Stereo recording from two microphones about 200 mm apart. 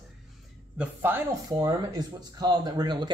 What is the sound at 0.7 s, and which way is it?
Speech, 10° right (ahead or behind).